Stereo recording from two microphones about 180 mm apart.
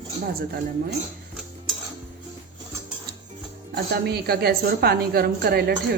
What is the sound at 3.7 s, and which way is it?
A woman's voice, 60° right (ahead or behind).